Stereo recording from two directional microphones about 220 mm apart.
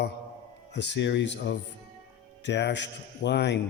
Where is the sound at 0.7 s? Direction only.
50° left (ahead or behind).